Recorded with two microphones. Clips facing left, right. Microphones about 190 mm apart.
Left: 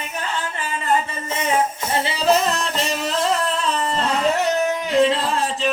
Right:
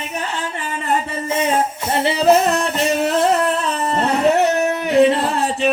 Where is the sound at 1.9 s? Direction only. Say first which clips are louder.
Right 5 dB; 60° right (ahead or behind).